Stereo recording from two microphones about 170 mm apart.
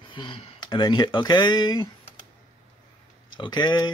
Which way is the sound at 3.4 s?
25° left (ahead or behind).